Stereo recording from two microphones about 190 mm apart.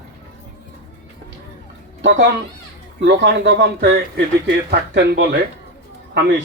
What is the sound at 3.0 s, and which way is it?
A man's voice, 60° right (ahead or behind).